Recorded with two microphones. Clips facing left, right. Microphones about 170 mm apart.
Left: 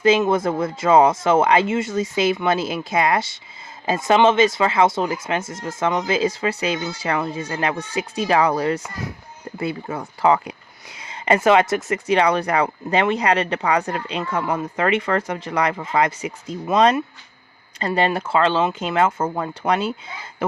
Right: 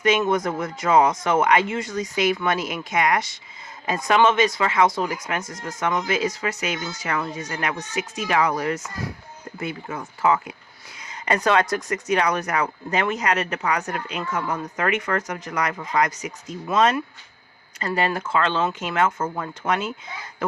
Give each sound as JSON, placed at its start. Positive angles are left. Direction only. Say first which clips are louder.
{"t": 0.0, "sound": "speech", "louder": "left 4 dB", "side_deg": 30}
{"t": 11.0, "sound": "a sound", "louder": "left 5 dB", "side_deg": 25}
{"t": 11.7, "sound": "speech", "louder": "left 3 dB", "side_deg": 25}